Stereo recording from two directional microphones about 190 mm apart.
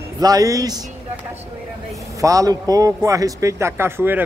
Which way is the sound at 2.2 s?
15° right (ahead or behind).